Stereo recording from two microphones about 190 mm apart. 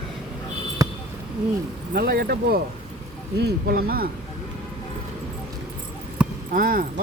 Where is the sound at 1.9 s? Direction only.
50° right (ahead or behind).